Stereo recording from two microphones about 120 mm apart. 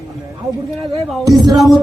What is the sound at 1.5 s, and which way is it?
Speech, centre (ahead or behind).